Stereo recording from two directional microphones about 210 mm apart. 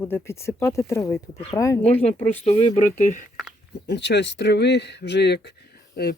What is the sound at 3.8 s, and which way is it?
Speech, 55° left (ahead or behind).